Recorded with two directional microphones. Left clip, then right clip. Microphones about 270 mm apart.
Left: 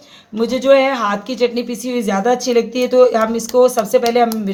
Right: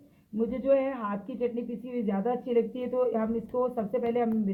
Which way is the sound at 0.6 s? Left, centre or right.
Centre.